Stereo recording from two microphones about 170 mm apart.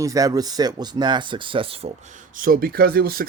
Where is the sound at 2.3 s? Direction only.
55° right (ahead or behind).